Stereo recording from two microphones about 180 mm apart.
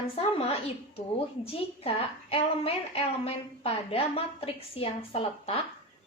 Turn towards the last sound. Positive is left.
turn(degrees=35)  # may be behind; listen again after turning